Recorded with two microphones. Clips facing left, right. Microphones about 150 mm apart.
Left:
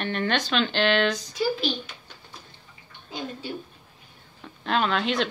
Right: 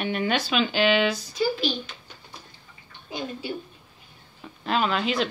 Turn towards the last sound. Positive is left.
turn(degrees=-5)  # may be behind; listen again after turning